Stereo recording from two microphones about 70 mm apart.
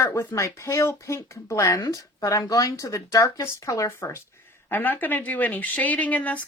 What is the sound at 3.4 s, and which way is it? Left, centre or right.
Speech, left.